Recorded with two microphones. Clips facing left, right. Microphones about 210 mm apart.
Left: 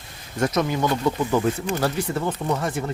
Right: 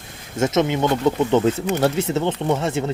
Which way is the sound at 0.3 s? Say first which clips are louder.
Right 3 dB; 25° right (ahead or behind).